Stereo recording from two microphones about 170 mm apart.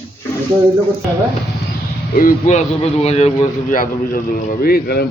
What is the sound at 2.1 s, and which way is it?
Speech, 55° left (ahead or behind).